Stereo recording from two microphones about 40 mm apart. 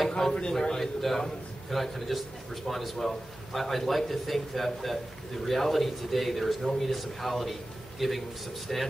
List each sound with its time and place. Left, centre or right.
0.3 s a man's voice: centre